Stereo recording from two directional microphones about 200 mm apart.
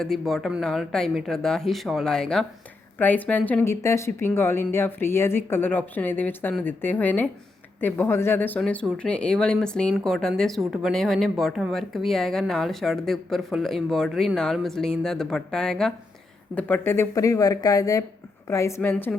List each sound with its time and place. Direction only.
0.0 s a woman's voice: centre (ahead or behind)